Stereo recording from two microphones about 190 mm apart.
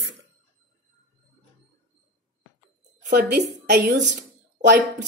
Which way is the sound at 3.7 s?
60° right (ahead or behind).